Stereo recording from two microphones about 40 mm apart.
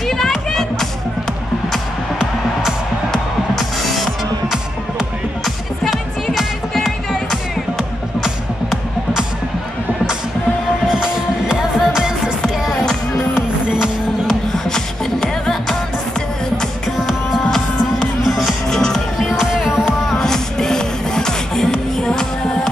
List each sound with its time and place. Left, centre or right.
0.0 s music: centre
3.5 s music: centre
10.9 s music: right
13.3 s music: right
14.5 s music: centre
18.2 s music: centre
18.7 s music: centre
19.1 s music: centre
19.4 s music: centre
19.8 s music: centre